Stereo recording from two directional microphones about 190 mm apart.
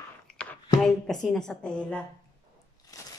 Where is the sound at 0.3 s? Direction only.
5° left (ahead or behind).